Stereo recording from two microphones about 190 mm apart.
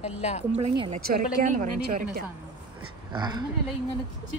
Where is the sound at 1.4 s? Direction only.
45° right (ahead or behind).